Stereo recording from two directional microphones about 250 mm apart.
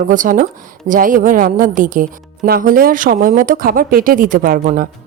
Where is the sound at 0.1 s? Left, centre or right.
Right.